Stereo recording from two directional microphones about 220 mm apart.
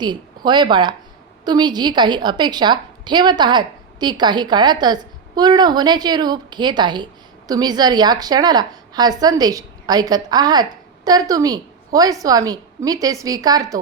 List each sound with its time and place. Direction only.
0.0 s a woman's voice: 20° right (ahead or behind)